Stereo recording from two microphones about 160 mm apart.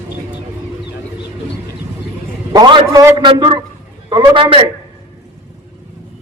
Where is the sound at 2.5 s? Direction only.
30° right (ahead or behind).